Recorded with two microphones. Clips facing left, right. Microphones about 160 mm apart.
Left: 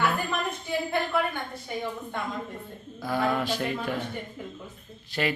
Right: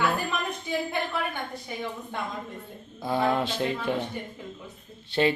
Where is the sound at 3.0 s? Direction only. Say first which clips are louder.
Right 2 dB; 25° right (ahead or behind).